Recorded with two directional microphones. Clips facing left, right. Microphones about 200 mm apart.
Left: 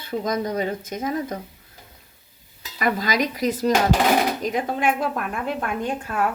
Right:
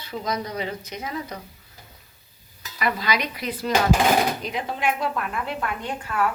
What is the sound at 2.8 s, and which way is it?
A woman's voice, 45° left (ahead or behind).